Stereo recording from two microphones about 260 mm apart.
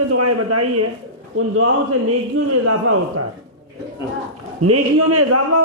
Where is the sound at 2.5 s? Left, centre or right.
Right.